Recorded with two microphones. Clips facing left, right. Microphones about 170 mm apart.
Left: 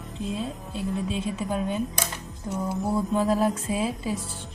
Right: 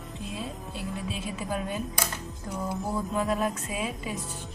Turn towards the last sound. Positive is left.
turn(degrees=30)  # may be behind; listen again after turning